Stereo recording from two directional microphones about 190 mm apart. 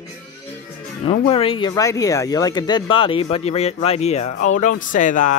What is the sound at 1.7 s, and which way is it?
Speech, 15° left (ahead or behind).